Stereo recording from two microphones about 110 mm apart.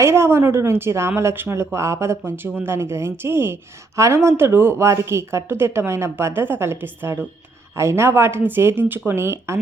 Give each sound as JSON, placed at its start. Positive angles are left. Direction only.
{"t": 0.0, "sound": "speech", "side_deg": -25}